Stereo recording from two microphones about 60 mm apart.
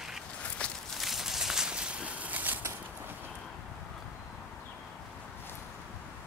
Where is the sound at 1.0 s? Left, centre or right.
Centre; by 2.6 s right.